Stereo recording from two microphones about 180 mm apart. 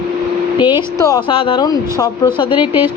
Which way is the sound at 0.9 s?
20° left (ahead or behind).